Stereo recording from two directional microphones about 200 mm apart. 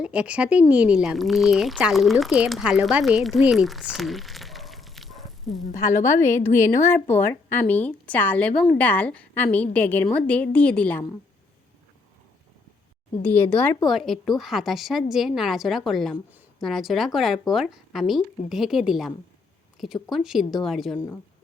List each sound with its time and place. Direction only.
0.0 s speech: 5° right (ahead or behind)
6.2 s a woman's voice: 10° left (ahead or behind)
13.2 s a woman's voice: 10° left (ahead or behind)